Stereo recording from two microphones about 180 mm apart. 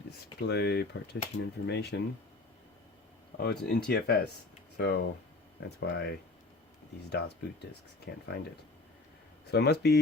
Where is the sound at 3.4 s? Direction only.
65° left (ahead or behind).